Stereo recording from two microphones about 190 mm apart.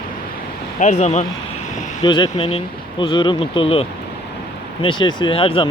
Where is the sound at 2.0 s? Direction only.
25° left (ahead or behind).